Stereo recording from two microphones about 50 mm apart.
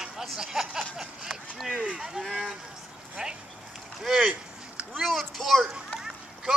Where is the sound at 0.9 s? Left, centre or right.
Centre.